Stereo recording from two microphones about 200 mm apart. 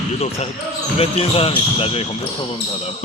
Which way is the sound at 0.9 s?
30° left (ahead or behind).